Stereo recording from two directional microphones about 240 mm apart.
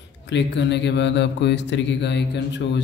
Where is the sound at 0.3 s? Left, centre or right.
Left.